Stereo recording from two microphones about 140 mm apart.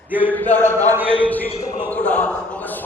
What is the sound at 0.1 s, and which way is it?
Speech, 15° right (ahead or behind).